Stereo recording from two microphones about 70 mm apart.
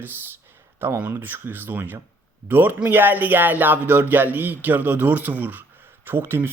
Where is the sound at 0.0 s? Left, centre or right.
Right.